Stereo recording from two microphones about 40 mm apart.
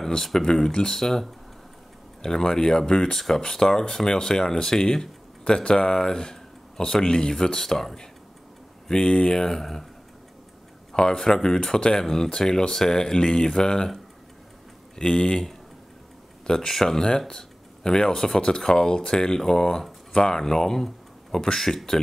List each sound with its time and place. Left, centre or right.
0.2 s speech: centre
5.4 s speech: left
8.8 s speech: left
10.9 s speech: centre
15.0 s speech: left